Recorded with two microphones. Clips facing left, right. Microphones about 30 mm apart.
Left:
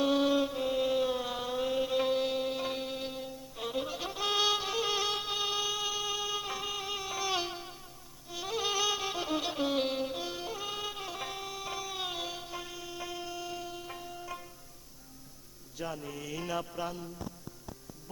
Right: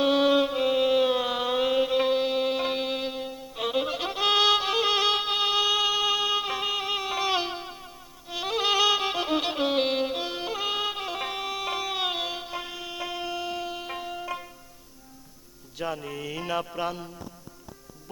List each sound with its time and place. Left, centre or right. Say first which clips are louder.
0.0 s music: right 6 dB; right
1.8 s mantra: right 6 dB; right
2.4 s music: right 7 dB; right
8.3 s music: right 8 dB; right
10.5 s music: right 9 dB; right
15.8 s music: right 7 dB; right
16.5 s mantra: right 7 dB; right